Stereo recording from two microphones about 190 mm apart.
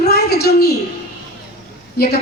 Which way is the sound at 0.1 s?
55° left (ahead or behind).